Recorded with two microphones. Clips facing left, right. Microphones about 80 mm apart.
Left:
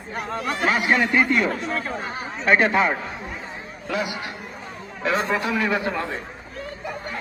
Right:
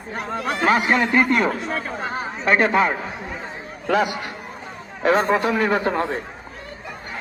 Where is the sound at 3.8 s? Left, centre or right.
Right.